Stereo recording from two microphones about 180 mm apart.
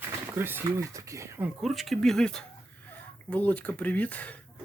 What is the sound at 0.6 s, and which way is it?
Speech, 15° right (ahead or behind).